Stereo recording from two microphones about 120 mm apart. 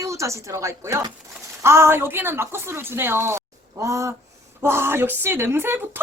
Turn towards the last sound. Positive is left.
turn(degrees=-20)  # may be behind; listen again after turning